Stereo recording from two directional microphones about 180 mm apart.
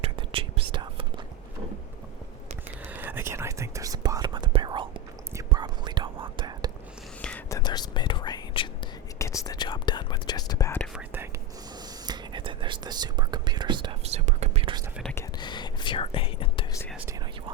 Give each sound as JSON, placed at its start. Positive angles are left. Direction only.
{"t": 0.0, "sound": "whispering", "side_deg": -30}
{"t": 2.9, "sound": "whispering", "side_deg": -10}
{"t": 7.2, "sound": "whispering", "side_deg": 5}
{"t": 7.5, "sound": "whispering", "side_deg": 25}
{"t": 10.9, "sound": "whispering", "side_deg": -10}
{"t": 12.0, "sound": "whispering", "side_deg": -25}
{"t": 15.4, "sound": "whispering", "side_deg": 25}